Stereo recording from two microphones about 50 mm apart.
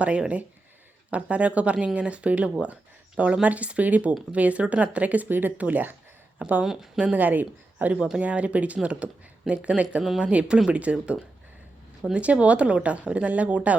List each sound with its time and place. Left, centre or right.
0.0 s speech: right
7.9 s speech: centre
8.2 s speech: right
12.2 s speech: right